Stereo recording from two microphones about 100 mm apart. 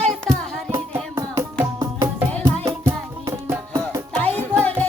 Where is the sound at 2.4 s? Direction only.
30° right (ahead or behind).